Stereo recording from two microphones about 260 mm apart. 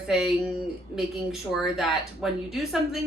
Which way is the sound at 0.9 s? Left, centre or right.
Centre.